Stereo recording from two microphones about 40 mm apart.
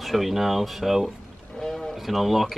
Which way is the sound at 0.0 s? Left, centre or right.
Centre.